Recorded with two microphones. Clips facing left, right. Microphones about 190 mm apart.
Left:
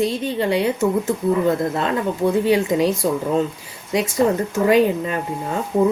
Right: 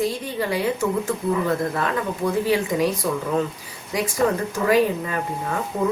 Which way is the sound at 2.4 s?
25° left (ahead or behind).